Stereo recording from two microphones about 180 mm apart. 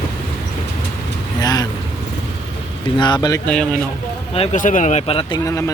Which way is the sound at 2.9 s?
25° left (ahead or behind).